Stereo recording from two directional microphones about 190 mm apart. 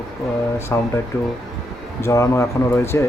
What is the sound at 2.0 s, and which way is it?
A man's voice, 15° left (ahead or behind).